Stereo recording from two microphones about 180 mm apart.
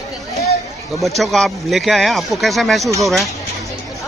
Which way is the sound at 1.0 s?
Centre (ahead or behind).